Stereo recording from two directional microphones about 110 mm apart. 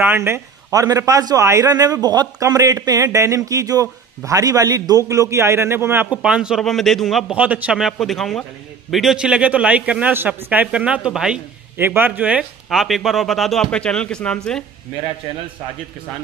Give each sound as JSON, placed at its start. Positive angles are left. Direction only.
{"t": 0.0, "sound": "a man's voice", "side_deg": -20}
{"t": 6.2, "sound": "a man's voice", "side_deg": -5}
{"t": 7.3, "sound": "a man's voice", "side_deg": -10}
{"t": 11.7, "sound": "a man's voice", "side_deg": -20}
{"t": 12.6, "sound": "a man's voice", "side_deg": 0}